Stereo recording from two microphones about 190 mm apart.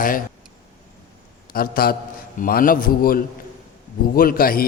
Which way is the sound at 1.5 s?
50° left (ahead or behind).